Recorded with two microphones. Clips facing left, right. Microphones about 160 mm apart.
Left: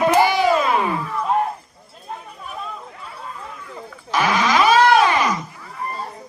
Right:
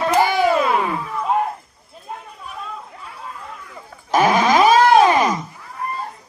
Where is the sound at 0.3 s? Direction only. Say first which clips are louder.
Even; 50° right (ahead or behind).